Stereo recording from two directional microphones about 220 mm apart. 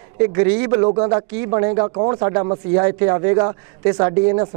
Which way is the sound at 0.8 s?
30° right (ahead or behind).